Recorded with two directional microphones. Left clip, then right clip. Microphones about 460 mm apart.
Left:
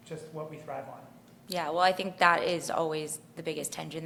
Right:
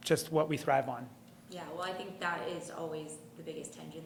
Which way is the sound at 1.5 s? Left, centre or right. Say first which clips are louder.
Left 13 dB; left.